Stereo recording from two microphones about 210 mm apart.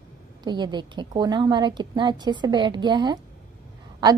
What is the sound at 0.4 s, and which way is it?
A woman's voice, 20° right (ahead or behind).